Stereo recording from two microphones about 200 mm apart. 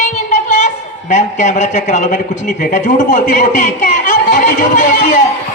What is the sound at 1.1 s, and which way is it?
A man's voice, 35° left (ahead or behind).